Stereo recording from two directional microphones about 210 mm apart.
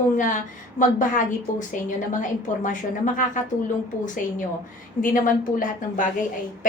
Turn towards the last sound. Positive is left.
turn(degrees=40)  # may be behind; listen again after turning